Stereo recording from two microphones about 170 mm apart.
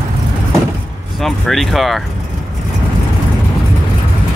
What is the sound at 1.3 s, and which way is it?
Speech, centre (ahead or behind).